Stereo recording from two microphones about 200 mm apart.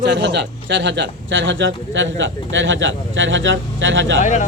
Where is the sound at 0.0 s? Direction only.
60° right (ahead or behind).